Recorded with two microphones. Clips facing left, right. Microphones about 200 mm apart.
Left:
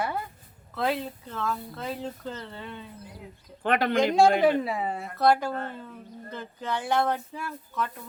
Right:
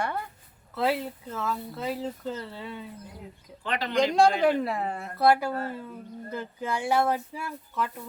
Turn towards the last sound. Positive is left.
turn(degrees=-10)  # may be behind; listen again after turning